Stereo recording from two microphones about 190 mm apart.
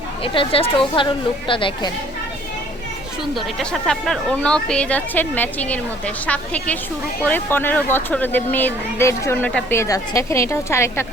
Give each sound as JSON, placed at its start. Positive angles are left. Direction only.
{"t": 0.2, "sound": "speech", "side_deg": 30}
{"t": 3.3, "sound": "speech", "side_deg": 5}